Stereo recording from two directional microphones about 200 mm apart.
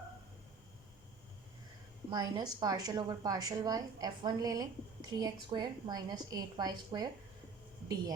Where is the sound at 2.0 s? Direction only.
20° right (ahead or behind).